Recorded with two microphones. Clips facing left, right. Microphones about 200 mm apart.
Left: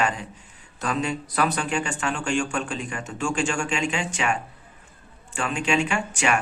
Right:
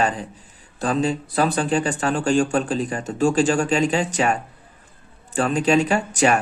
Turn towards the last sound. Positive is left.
turn(degrees=-35)  # may be behind; listen again after turning